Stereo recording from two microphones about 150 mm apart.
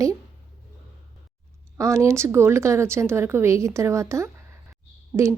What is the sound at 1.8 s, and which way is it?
A woman's voice, 20° right (ahead or behind).